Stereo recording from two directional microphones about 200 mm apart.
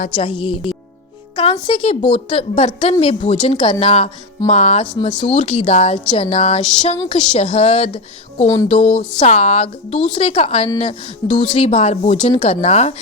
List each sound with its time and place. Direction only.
0.2 s a woman's voice: 25° left (ahead or behind)